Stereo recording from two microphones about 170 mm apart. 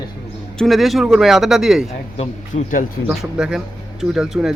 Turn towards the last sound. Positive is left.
turn(degrees=-5)  # may be behind; listen again after turning